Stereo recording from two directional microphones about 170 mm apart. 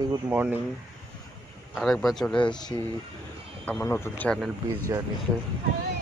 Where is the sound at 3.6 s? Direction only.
10° left (ahead or behind).